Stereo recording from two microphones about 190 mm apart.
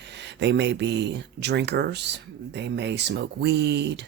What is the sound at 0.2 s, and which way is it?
Speech, 65° right (ahead or behind).